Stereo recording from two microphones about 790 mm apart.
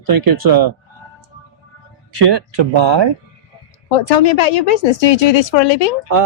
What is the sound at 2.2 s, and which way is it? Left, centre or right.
Speech, right.